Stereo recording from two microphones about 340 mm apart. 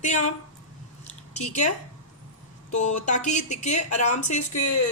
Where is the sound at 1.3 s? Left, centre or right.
Centre.